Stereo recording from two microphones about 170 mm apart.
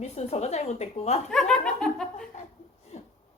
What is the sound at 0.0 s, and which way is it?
A woman's voice, 40° left (ahead or behind).